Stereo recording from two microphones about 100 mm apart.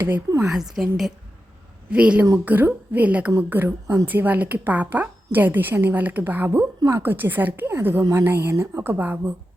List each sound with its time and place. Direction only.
0.4 s a woman's voice: 5° right (ahead or behind); by 9.3 s 20° right (ahead or behind)